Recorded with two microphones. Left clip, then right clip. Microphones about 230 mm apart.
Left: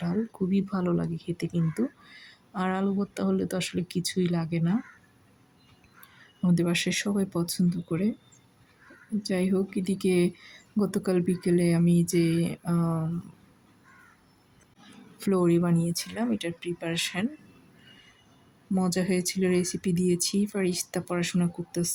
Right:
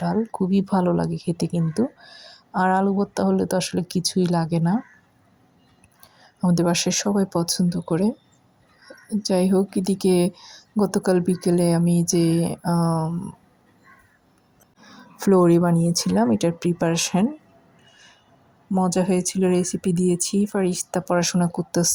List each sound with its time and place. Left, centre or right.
0.0 s a woman's voice: centre
6.4 s a woman's voice: centre
9.2 s a woman's voice: centre
12.8 s speech: centre
15.2 s speech: centre
18.7 s a woman's voice: centre